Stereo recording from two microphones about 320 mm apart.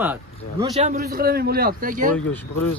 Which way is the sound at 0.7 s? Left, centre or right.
Right.